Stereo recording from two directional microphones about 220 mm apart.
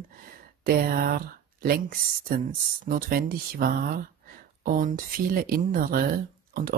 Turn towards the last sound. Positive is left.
turn(degrees=-40)  # may be behind; listen again after turning